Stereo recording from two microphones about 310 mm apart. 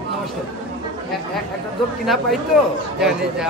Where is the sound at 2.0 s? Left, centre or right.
Centre.